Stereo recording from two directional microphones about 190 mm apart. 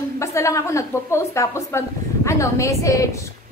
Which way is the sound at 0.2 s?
15° left (ahead or behind).